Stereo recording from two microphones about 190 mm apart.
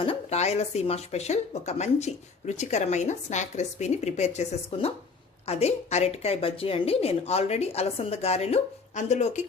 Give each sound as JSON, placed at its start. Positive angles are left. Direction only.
{"t": 0.0, "sound": "speech", "side_deg": 30}